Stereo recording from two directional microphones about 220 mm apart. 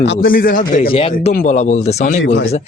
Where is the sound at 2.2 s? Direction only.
55° left (ahead or behind).